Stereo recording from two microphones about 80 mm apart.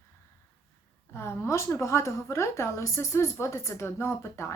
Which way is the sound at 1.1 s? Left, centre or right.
Left.